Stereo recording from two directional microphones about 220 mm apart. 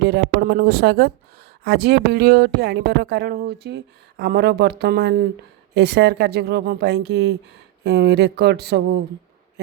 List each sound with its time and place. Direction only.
0.0 s speech: 45° right (ahead or behind)